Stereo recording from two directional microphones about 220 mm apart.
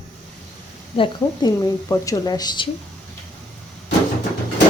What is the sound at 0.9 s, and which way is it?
A woman's voice, 20° left (ahead or behind).